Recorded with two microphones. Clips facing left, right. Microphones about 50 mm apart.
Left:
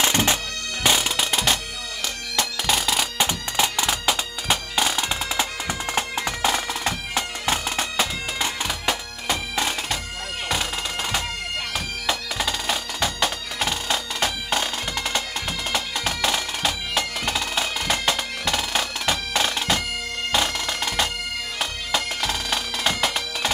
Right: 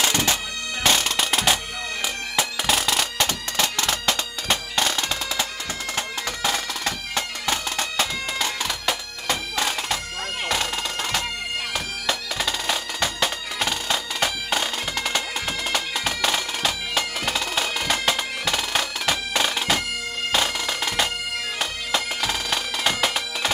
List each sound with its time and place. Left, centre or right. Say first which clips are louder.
0.0 s bagpipes: left 1 dB; left
0.8 s music: even; centre
3.2 s bagpipes: left 1 dB; centre
5.3 s bagpipes: left 2 dB; centre